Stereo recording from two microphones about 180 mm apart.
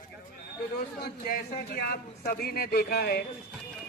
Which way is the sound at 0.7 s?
55° left (ahead or behind).